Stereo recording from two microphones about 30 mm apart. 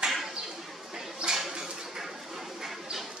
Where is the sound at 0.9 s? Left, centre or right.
Centre.